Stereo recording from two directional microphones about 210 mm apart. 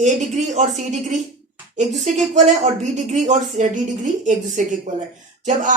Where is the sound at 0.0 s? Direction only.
35° right (ahead or behind).